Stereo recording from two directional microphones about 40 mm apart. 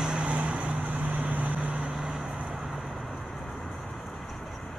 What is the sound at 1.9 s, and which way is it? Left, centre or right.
Vehicle, centre.